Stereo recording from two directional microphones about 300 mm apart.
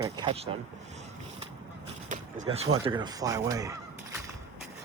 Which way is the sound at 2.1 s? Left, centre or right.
Right.